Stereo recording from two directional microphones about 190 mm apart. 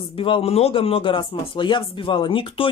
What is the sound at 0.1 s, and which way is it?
A man's voice, 30° left (ahead or behind).